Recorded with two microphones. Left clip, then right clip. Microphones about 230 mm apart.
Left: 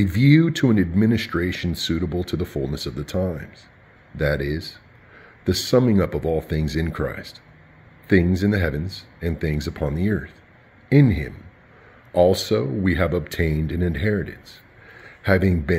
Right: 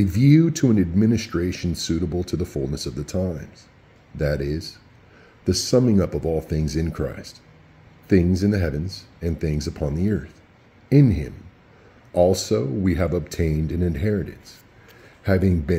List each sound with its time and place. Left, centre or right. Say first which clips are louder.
0.0 s a man's voice: even; centre
8.1 s speech: left 1 dB; centre
10.9 s speech: even; centre
15.2 s speech: left 2 dB; centre